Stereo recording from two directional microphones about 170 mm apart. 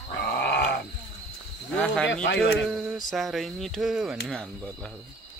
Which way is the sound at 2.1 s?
90° left.